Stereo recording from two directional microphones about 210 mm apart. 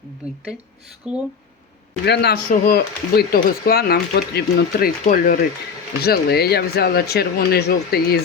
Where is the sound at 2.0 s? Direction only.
50° left (ahead or behind).